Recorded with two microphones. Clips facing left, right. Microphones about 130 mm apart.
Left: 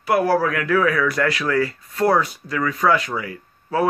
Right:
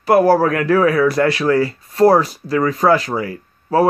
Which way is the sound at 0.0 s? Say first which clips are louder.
Right 6 dB; 40° right (ahead or behind).